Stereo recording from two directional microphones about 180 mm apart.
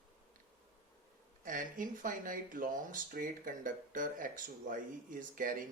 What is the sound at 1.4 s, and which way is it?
Speech, 50° right (ahead or behind).